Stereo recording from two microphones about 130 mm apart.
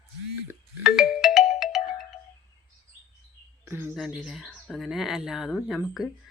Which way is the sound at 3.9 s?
5° right (ahead or behind).